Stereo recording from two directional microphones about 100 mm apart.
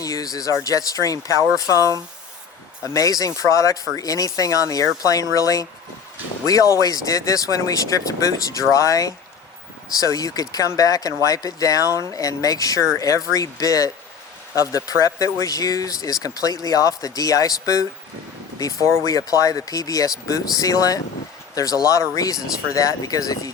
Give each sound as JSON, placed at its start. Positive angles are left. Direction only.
{"t": 0.0, "sound": "speech", "side_deg": 35}